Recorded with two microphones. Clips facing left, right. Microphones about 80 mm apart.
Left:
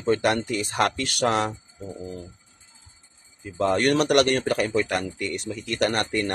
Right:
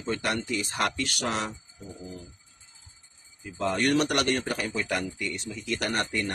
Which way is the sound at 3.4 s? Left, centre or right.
Left.